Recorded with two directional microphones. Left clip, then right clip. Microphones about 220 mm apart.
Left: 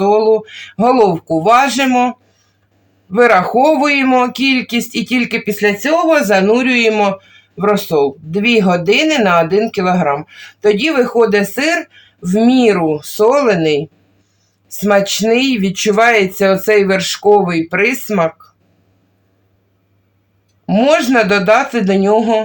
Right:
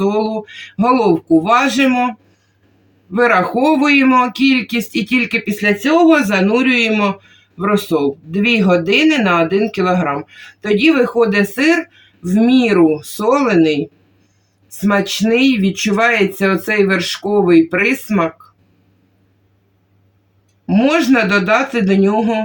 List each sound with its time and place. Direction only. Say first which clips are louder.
0.0 s speech: left 6 dB; 40° left (ahead or behind)
20.7 s speech: left 2 dB; 40° left (ahead or behind)